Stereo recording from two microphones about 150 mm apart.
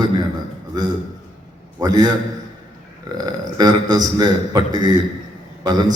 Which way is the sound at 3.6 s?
25° right (ahead or behind).